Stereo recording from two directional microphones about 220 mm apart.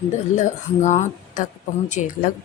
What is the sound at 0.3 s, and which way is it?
Speech, 35° left (ahead or behind).